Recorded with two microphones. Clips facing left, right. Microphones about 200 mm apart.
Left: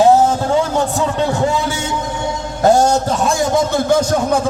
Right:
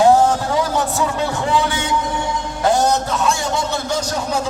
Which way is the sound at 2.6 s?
45° left (ahead or behind).